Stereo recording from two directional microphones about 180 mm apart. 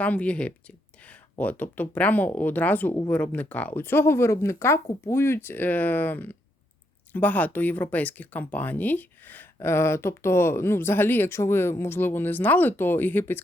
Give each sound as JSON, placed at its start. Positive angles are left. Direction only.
{"t": 0.0, "sound": "speech", "side_deg": 5}